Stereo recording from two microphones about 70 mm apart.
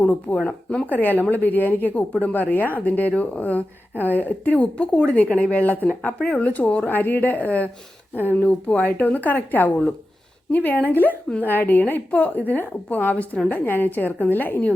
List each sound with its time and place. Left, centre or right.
0.0 s speech: left
8.4 s speech: centre